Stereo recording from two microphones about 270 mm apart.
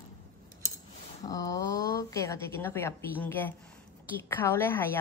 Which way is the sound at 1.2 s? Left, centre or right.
Centre.